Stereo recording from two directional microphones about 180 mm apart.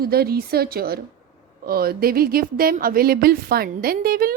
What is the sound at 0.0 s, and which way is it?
Speech, 60° right (ahead or behind).